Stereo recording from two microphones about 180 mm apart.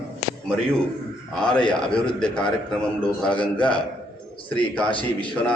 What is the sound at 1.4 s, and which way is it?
A man's voice, 5° left (ahead or behind).